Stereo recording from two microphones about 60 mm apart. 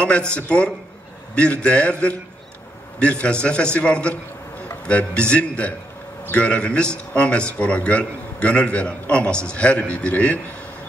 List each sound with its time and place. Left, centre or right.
0.0 s a man's voice: centre